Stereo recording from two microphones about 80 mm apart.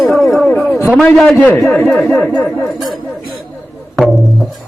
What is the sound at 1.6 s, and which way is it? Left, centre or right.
Speech, centre.